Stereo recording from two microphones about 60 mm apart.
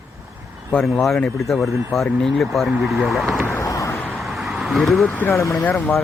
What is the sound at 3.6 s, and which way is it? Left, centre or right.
Vehicle, left.